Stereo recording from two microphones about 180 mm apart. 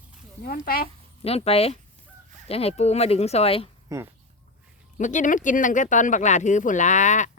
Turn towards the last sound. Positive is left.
turn(degrees=45)  # may be behind; listen again after turning